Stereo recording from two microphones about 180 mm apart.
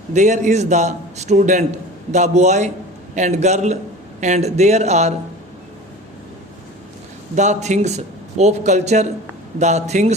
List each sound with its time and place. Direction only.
0.1 s a man's voice: 40° right (ahead or behind)
7.3 s a man's voice: 40° right (ahead or behind)